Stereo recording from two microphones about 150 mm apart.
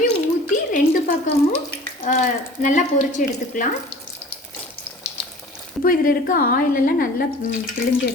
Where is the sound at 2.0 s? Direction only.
60° left (ahead or behind).